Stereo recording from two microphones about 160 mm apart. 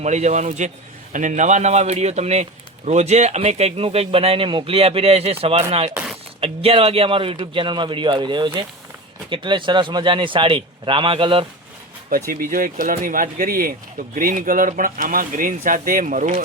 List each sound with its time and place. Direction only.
0.0 s a man's voice: 45° right (ahead or behind)
5.9 s a sound: 10° right (ahead or behind)
6.4 s speech: 35° right (ahead or behind)
12.3 s speech: 60° right (ahead or behind)